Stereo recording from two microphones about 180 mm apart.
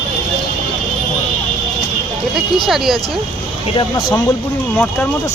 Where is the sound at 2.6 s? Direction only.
Centre (ahead or behind).